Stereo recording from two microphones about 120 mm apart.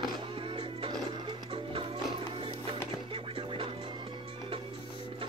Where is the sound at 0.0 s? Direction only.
45° right (ahead or behind).